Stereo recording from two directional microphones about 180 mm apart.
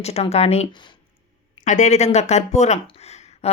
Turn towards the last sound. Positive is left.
turn(degrees=40)  # may be behind; listen again after turning